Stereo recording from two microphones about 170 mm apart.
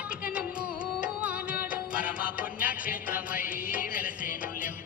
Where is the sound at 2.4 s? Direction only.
55° left (ahead or behind).